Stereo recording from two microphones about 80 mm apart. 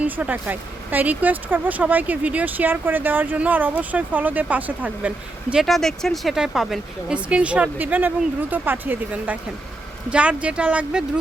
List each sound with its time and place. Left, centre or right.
0.0 s speech: centre
5.6 s speech: centre
7.1 s speech: centre